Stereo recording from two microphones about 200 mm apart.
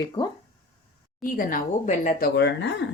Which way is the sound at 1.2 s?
45° left (ahead or behind).